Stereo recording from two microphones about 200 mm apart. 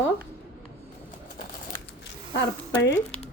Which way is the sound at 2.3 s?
60° left (ahead or behind).